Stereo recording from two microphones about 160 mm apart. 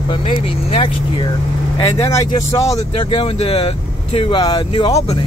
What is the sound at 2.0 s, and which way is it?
Speech, 20° left (ahead or behind).